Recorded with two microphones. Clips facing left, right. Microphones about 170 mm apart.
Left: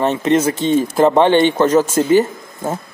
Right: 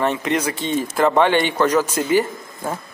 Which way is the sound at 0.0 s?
25° left (ahead or behind).